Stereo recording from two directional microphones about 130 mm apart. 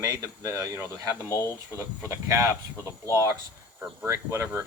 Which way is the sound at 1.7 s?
20° right (ahead or behind).